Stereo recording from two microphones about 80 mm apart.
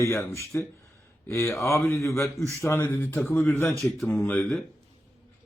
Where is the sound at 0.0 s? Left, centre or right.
Left.